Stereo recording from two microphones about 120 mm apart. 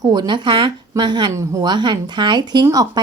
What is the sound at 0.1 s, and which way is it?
A woman's voice, 40° right (ahead or behind).